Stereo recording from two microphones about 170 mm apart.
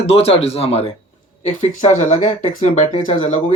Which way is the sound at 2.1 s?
45° left (ahead or behind).